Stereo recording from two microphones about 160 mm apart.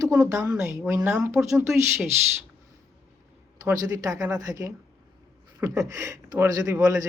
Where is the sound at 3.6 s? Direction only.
20° right (ahead or behind).